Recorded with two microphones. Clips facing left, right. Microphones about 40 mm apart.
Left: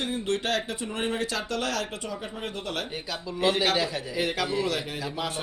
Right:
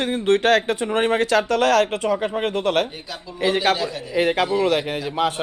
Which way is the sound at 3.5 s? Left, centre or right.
Right.